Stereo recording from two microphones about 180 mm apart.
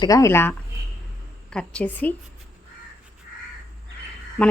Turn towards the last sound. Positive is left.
turn(degrees=5)  # may be behind; listen again after turning